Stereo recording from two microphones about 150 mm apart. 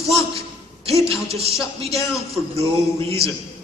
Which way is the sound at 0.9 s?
40° right (ahead or behind).